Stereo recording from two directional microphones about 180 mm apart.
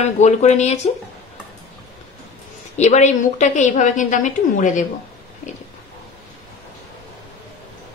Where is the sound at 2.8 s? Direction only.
40° left (ahead or behind).